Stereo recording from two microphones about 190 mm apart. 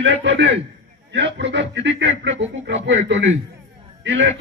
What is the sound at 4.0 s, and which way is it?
Speech, 75° right (ahead or behind).